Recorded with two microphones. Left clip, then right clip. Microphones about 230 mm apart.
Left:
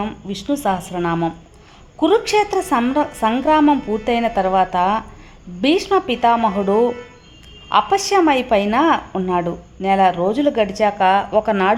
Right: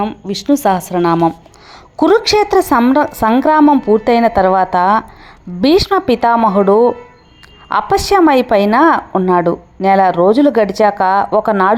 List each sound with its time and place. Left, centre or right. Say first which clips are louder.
0.4 s a woman's voice: right 7 dB; centre